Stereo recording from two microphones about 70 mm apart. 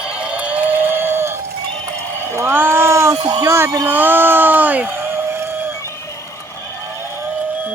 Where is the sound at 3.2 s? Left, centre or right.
Right.